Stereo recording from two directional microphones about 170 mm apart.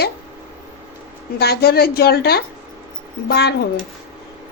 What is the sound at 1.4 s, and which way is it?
A woman's voice, 70° left (ahead or behind).